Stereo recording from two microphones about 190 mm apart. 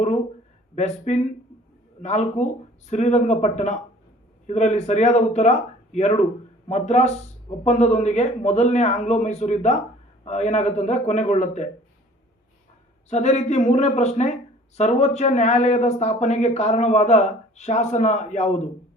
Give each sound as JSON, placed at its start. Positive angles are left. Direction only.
{"t": 0.8, "sound": "speech", "side_deg": 35}
{"t": 13.1, "sound": "speech", "side_deg": 35}